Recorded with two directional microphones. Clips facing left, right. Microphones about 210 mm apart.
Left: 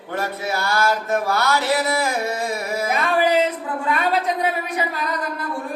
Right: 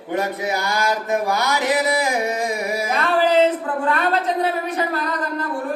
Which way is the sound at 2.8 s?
10° left (ahead or behind).